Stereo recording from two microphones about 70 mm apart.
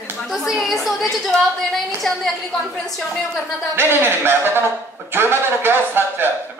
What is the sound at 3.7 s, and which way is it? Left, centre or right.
A man's voice, right.